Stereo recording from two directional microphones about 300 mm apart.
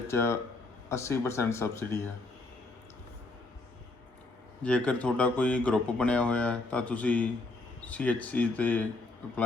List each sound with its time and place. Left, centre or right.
0.1 s speech: centre
4.6 s speech: centre